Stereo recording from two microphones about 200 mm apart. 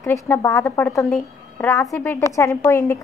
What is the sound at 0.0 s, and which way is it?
A woman's voice, 15° left (ahead or behind).